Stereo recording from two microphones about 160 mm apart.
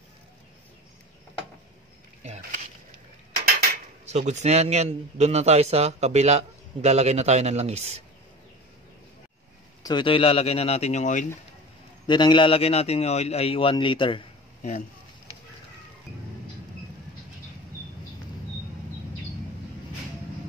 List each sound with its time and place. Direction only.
2.2 s a sound: 45° right (ahead or behind)
4.0 s a man's voice: 45° right (ahead or behind)
9.8 s a man's voice: 30° left (ahead or behind); by 11.2 s 50° left (ahead or behind)
12.1 s a man's voice: 30° left (ahead or behind)